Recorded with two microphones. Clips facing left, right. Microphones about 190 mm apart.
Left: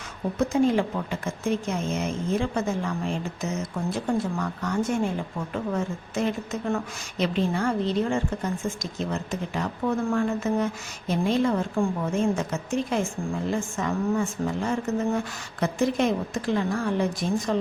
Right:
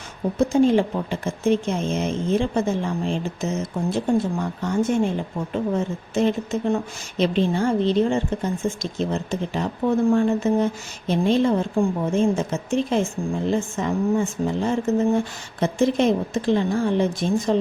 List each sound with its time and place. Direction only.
0.3 s a woman's voice: 25° right (ahead or behind)